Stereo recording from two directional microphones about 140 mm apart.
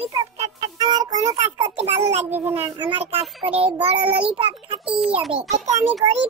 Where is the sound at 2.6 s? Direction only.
40° right (ahead or behind).